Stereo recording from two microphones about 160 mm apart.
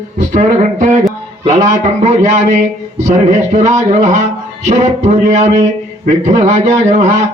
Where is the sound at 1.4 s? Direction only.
45° right (ahead or behind).